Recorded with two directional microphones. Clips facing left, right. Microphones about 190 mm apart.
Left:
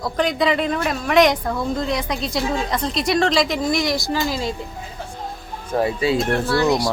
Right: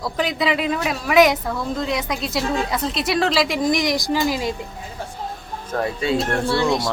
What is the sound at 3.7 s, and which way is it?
Speech, 15° right (ahead or behind).